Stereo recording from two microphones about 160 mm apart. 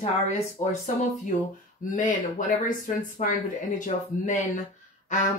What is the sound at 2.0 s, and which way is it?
Speech, 55° left (ahead or behind).